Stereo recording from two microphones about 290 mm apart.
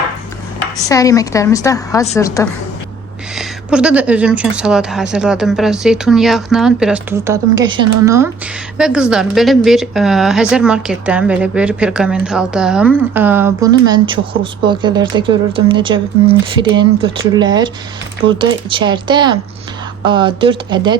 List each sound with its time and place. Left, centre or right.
0.9 s a woman's voice: centre
3.3 s speech: centre